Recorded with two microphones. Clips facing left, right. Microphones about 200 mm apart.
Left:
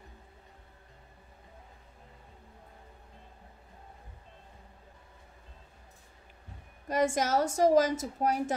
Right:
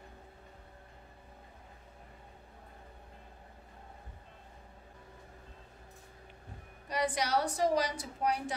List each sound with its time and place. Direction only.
6.9 s a woman's voice: 45° left (ahead or behind)